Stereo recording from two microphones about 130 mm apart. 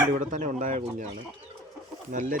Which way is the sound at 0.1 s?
70° right (ahead or behind).